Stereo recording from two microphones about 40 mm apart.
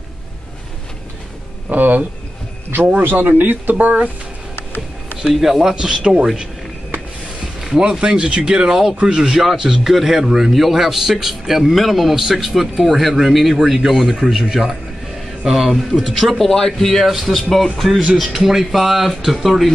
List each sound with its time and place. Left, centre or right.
1.7 s speech: right
3.0 s speech: right
5.2 s speech: centre; by 6.2 s right
7.6 s a man's voice: centre
18.2 s a man's voice: centre